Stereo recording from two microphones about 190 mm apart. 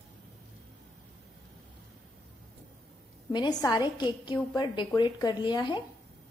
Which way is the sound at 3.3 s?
20° left (ahead or behind).